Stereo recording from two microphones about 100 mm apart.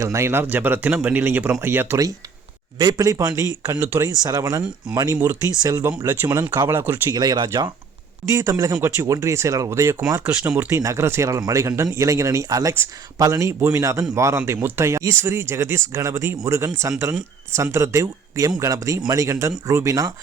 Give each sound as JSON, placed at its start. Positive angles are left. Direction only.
{"t": 0.0, "sound": "a man's voice", "side_deg": -30}
{"t": 2.7, "sound": "speech", "side_deg": -40}
{"t": 6.7, "sound": "speech", "side_deg": -25}
{"t": 7.1, "sound": "speech", "side_deg": -40}